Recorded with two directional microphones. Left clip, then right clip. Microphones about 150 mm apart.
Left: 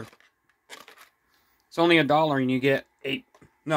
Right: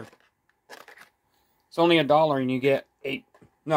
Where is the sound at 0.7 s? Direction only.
30° right (ahead or behind).